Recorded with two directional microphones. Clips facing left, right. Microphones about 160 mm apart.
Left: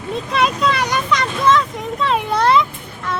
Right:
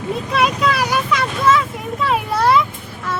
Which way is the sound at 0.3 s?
5° right (ahead or behind).